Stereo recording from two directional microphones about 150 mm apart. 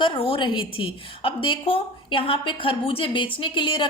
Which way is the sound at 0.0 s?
35° left (ahead or behind).